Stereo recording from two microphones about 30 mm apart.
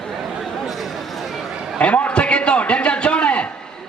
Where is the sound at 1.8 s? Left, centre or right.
Left.